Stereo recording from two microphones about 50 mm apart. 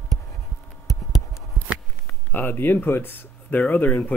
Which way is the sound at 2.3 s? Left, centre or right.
Left.